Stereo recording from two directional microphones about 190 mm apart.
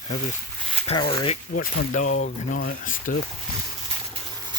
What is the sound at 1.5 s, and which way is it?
Speech, 40° left (ahead or behind).